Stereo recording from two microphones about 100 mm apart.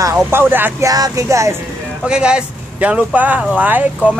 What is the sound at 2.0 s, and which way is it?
Speech, 10° right (ahead or behind).